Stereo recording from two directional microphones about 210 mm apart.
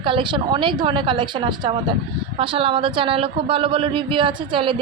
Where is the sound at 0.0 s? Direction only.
25° right (ahead or behind).